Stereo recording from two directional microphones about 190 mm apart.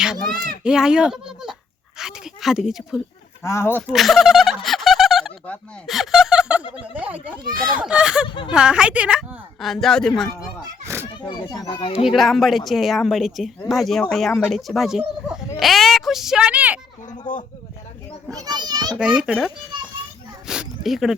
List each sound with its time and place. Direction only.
0.6 s speech: 5° right (ahead or behind)
3.4 s speech: 15° left (ahead or behind)
3.9 s speech: centre (ahead or behind)
8.3 s a child's voice: 25° left (ahead or behind)
8.5 s speech: 5° right (ahead or behind)
10.8 s a sound: 15° right (ahead or behind)
11.2 s a child's voice: 20° left (ahead or behind)
12.0 s speech: centre (ahead or behind)
18.3 s a child's voice: 20° right (ahead or behind)
18.9 s speech: 5° right (ahead or behind)
20.5 s speech: centre (ahead or behind)